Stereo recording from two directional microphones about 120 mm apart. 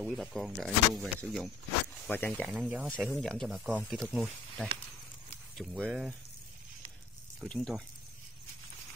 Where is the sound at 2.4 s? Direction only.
10° right (ahead or behind).